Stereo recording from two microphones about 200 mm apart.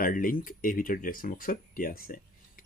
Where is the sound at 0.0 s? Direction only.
45° left (ahead or behind).